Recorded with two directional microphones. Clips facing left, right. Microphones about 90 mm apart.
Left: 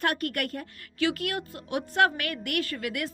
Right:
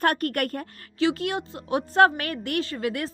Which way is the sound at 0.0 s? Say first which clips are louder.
Right 5 dB; 40° right (ahead or behind).